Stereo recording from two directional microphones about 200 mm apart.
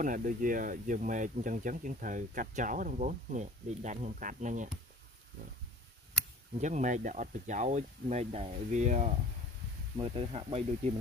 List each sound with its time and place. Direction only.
0.0 s speech: 40° right (ahead or behind)
6.6 s speech: 35° right (ahead or behind)